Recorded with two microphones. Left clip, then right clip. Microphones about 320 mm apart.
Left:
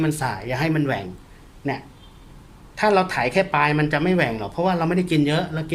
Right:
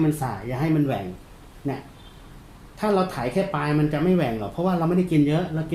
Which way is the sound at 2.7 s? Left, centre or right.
Left.